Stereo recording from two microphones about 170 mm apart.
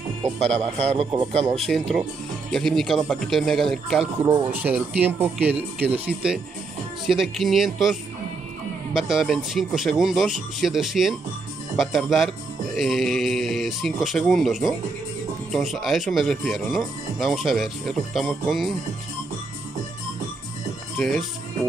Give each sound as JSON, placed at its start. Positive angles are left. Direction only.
{"t": 0.9, "sound": "speech", "side_deg": -30}
{"t": 1.6, "sound": "speech", "side_deg": 0}